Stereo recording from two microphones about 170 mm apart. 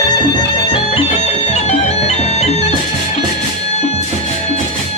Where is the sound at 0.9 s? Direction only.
40° left (ahead or behind).